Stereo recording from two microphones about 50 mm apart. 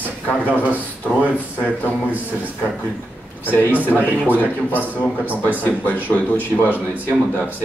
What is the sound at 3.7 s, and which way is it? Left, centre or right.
Speech, right.